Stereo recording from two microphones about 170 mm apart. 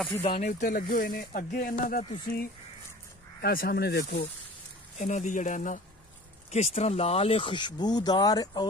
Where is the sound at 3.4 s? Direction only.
65° left (ahead or behind).